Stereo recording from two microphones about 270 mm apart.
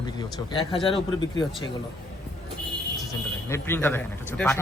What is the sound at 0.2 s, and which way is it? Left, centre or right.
A man's voice, centre.